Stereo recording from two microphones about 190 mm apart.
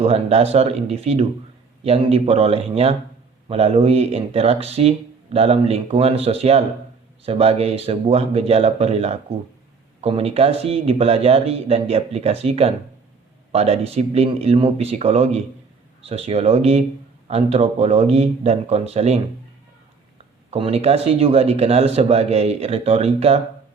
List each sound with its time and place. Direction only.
0.0 s speech: 35° right (ahead or behind)
20.5 s speech: 30° right (ahead or behind)